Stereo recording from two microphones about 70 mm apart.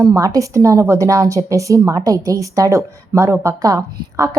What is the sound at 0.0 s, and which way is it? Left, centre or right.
A woman's voice, right.